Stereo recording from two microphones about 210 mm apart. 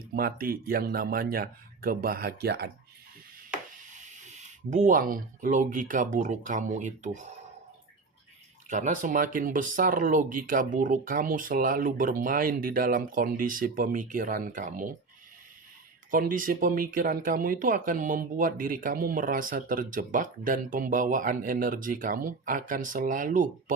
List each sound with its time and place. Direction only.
0.1 s speech: 45° right (ahead or behind)
3.9 s speech: 35° right (ahead or behind)
8.7 s speech: 35° right (ahead or behind)
16.1 s speech: 40° right (ahead or behind)